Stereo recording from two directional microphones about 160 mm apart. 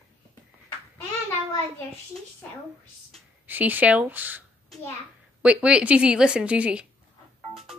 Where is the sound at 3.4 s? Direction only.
10° right (ahead or behind).